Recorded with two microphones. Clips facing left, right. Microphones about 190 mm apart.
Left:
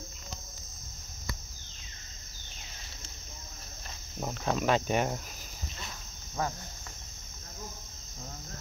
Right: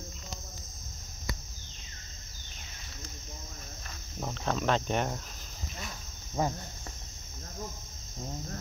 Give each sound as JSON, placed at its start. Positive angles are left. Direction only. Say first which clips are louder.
{"t": 4.2, "sound": "speech", "louder": "left 1 dB", "side_deg": 10}
{"t": 6.4, "sound": "cricket", "louder": "right 3 dB", "side_deg": -20}